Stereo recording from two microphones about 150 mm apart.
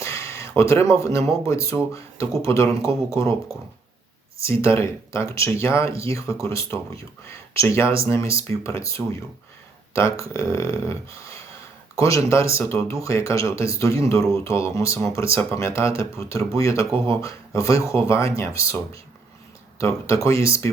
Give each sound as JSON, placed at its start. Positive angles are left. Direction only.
{"t": 0.0, "sound": "a sound", "side_deg": 20}
{"t": 1.3, "sound": "speech", "side_deg": 20}
{"t": 4.4, "sound": "speech", "side_deg": 20}
{"t": 19.8, "sound": "speech", "side_deg": 20}